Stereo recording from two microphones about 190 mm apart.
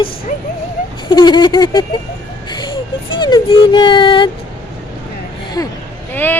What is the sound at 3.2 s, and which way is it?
Speech, 20° left (ahead or behind).